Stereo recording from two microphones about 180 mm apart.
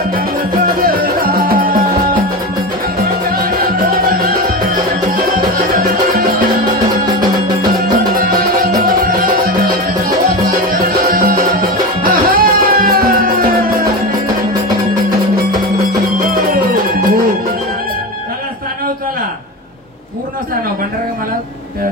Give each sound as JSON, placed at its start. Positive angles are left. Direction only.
{"t": 0.7, "sound": "music", "side_deg": -55}
{"t": 3.3, "sound": "music", "side_deg": -55}
{"t": 6.6, "sound": "music", "side_deg": -20}
{"t": 7.9, "sound": "music", "side_deg": -55}